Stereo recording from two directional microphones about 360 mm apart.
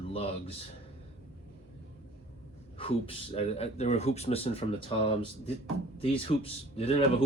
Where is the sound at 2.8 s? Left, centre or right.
Centre.